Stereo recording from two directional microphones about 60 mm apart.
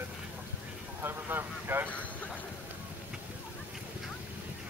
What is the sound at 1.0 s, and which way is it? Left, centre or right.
Speech, right.